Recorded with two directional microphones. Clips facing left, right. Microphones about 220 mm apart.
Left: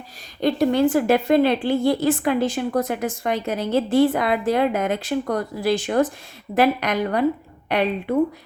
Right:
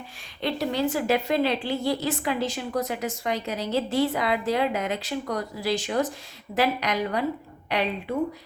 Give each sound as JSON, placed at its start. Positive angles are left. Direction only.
{"t": 0.4, "sound": "a woman's voice", "side_deg": 50}